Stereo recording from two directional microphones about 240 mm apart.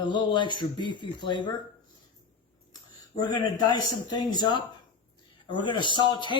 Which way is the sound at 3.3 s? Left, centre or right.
Centre.